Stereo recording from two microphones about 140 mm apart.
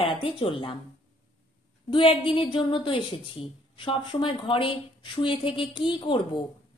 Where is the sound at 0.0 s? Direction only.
40° left (ahead or behind).